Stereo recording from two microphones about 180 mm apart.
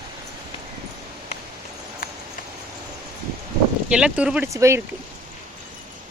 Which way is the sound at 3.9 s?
5° right (ahead or behind).